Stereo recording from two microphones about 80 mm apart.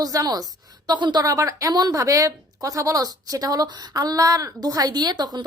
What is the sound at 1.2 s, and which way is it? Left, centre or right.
A woman's voice, right.